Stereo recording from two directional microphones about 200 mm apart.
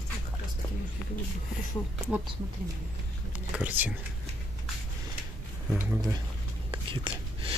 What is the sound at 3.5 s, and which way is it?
Speech, 5° right (ahead or behind).